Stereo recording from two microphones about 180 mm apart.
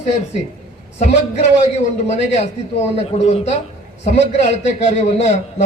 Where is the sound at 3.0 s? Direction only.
35° left (ahead or behind).